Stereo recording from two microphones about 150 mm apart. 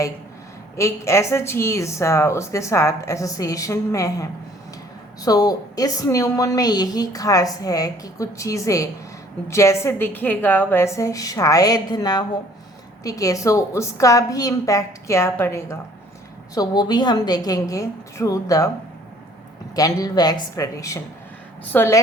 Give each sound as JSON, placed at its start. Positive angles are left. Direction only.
{"t": 0.8, "sound": "a woman's voice", "side_deg": 20}
{"t": 16.6, "sound": "a woman's voice", "side_deg": 30}
{"t": 19.7, "sound": "a woman's voice", "side_deg": 25}